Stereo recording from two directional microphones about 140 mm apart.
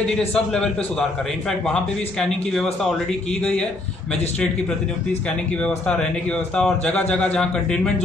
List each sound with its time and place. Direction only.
0.3 s a man's voice: 5° left (ahead or behind)
5.6 s a man's voice: 5° left (ahead or behind)